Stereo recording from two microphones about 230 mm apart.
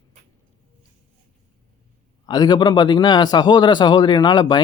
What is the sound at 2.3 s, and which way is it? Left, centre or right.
Speech, centre.